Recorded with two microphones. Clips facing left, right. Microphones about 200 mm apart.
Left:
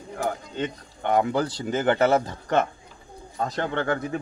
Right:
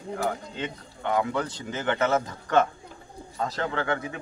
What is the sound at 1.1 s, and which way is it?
A man's voice, 35° left (ahead or behind).